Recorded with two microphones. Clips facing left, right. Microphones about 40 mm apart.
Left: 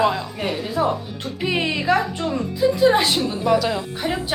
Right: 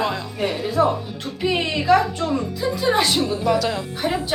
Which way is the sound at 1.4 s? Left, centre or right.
Centre.